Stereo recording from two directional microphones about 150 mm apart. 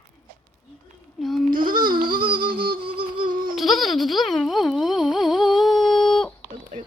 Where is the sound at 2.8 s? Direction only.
35° right (ahead or behind).